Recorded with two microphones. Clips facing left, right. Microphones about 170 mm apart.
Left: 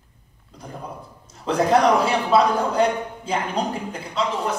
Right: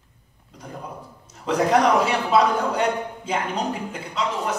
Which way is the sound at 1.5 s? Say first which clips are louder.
Left 1 dB; 30° left (ahead or behind).